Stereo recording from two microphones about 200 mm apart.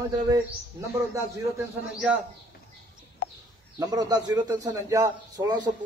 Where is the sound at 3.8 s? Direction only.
20° right (ahead or behind).